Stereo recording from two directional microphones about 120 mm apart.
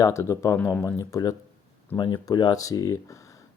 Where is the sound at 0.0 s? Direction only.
25° left (ahead or behind).